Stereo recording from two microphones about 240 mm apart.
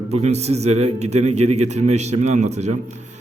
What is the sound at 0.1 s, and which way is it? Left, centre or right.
A man's voice, right.